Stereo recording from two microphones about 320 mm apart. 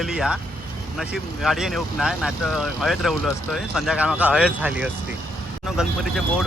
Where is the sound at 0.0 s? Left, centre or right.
Centre.